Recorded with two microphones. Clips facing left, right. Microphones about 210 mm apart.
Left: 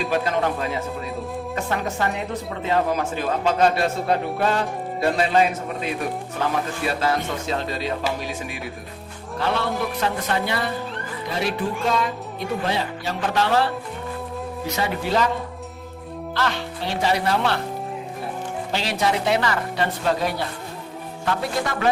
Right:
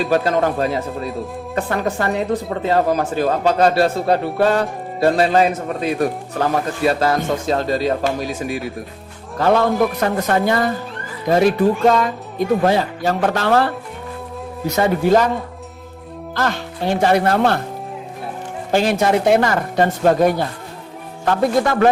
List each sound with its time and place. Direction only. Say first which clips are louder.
0.1 s speech: right 5 dB; 40° right (ahead or behind)
14.8 s speech: right 8 dB; 45° right (ahead or behind)
16.3 s speech: right 4 dB; 45° right (ahead or behind)
18.7 s speech: right 8 dB; 50° right (ahead or behind)